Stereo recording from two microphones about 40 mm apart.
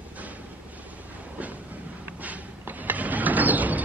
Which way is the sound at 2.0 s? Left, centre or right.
Right.